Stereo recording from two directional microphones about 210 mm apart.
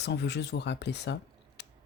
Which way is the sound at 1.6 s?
55° left (ahead or behind).